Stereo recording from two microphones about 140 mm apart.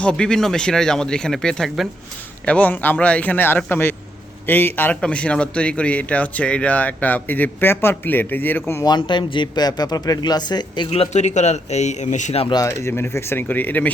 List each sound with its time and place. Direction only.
0.0 s a man's voice: 5° left (ahead or behind)
8.9 s speech: 35° left (ahead or behind)
10.8 s a man's voice: 45° left (ahead or behind)
12.5 s a man's voice: 20° left (ahead or behind)